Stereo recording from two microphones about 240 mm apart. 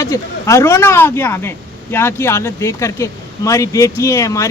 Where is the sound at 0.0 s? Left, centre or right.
Centre.